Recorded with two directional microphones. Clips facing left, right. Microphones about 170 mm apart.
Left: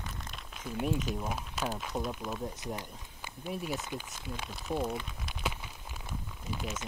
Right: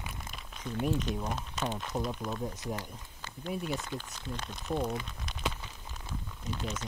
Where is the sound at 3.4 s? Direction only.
Centre (ahead or behind).